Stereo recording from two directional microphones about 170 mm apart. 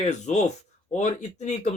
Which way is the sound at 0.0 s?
40° left (ahead or behind).